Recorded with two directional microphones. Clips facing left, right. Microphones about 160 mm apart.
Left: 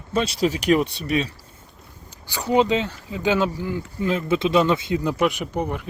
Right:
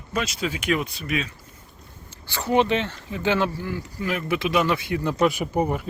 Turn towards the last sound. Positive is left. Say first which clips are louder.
# right 2 dB
turn(degrees=-5)  # may be behind; listen again after turning